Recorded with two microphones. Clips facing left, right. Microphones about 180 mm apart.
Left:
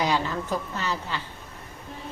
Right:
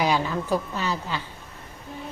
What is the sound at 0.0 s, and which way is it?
A woman's voice, 10° right (ahead or behind).